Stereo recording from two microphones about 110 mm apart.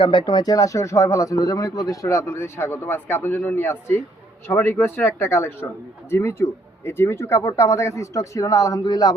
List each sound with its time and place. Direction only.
0.0 s speech: 50° left (ahead or behind)